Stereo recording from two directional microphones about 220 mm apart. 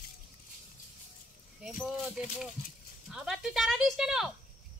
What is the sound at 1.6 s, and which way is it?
Keys jangling, 5° right (ahead or behind).